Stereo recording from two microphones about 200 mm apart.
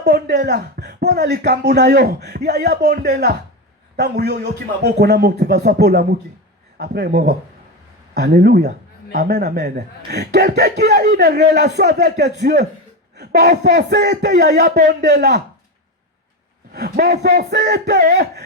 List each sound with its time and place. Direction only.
0.0 s a man's voice: 55° right (ahead or behind)
16.7 s speech: 55° right (ahead or behind)